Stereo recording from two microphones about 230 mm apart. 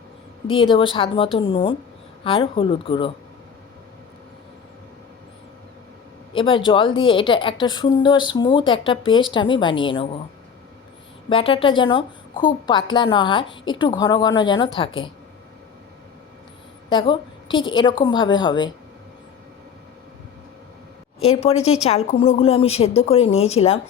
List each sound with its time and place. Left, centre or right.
0.4 s a woman's voice: left
6.3 s a woman's voice: left
11.3 s a woman's voice: left
16.9 s a woman's voice: left
21.2 s a woman's voice: left